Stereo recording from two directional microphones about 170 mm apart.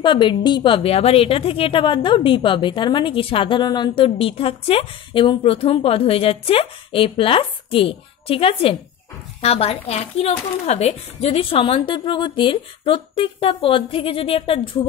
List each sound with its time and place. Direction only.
0.0 s a woman's voice: 30° left (ahead or behind)